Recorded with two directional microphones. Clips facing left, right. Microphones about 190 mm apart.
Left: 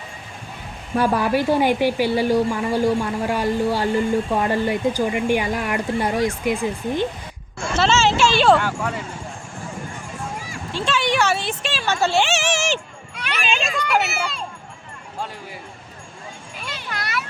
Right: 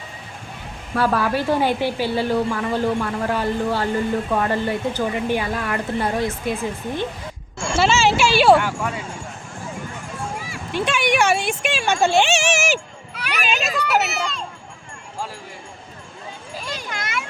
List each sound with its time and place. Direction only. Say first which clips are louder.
0.9 s a woman's voice: left 1 dB; 15° left (ahead or behind)
7.8 s speech: even; 10° right (ahead or behind)
10.7 s speech: right 1 dB; 15° right (ahead or behind); by 14.4 s 5° left (ahead or behind)